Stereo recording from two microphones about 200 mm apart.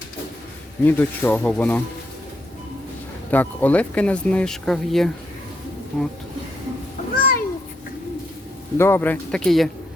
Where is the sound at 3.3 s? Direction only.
10° left (ahead or behind).